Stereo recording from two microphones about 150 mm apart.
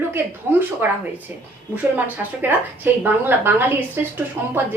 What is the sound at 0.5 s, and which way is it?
Speech, 15° right (ahead or behind).